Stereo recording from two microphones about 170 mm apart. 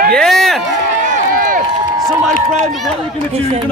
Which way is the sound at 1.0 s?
45° right (ahead or behind).